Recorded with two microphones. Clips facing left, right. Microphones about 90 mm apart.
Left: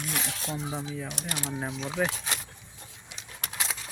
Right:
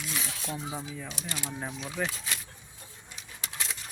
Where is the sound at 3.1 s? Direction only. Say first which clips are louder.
Left 2 dB; 90° left.